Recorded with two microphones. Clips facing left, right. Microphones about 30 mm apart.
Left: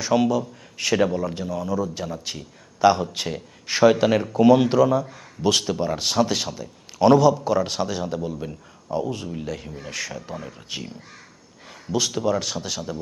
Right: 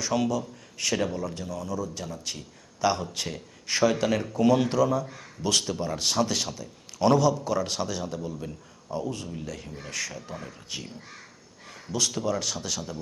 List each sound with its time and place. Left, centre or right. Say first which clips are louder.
0.0 s speech: left 6 dB; centre